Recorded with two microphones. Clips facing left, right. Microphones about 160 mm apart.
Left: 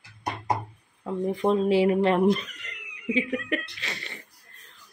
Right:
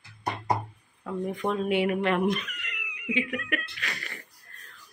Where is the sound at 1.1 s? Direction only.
25° left (ahead or behind).